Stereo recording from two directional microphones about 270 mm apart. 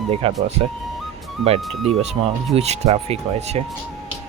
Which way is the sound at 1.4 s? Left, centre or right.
Right.